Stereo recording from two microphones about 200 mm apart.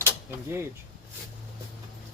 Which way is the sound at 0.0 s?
10° right (ahead or behind).